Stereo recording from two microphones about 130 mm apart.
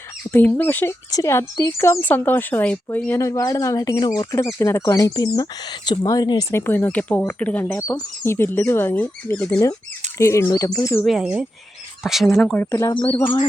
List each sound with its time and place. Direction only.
0.3 s speech: 15° left (ahead or behind); by 6.4 s 30° left (ahead or behind)
6.5 s speech: 20° left (ahead or behind)
7.8 s speech: 20° left (ahead or behind)
11.0 s speech: 5° right (ahead or behind)
12.9 s speech: 40° left (ahead or behind)